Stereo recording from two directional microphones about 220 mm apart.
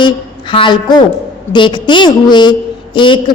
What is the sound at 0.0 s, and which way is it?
A woman's voice, 20° left (ahead or behind).